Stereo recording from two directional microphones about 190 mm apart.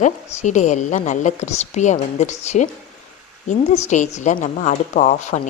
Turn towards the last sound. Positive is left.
turn(degrees=40)  # may be behind; listen again after turning